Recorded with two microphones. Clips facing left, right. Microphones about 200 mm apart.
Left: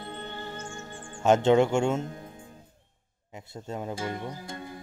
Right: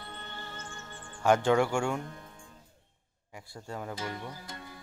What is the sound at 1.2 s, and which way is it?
Speech, 25° left (ahead or behind).